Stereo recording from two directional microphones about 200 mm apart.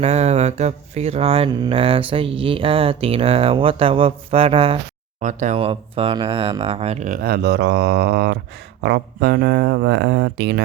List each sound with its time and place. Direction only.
0.0 s speech: 35° right (ahead or behind); by 10.6 s 60° right (ahead or behind)